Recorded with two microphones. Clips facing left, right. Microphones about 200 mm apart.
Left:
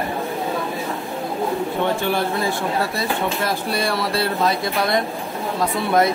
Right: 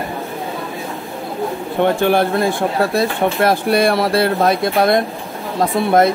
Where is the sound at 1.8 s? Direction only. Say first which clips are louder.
Right 9 dB; 60° right (ahead or behind).